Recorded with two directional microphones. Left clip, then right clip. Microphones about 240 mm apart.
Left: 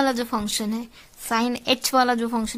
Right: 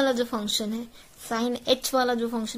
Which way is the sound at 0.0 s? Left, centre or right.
Left.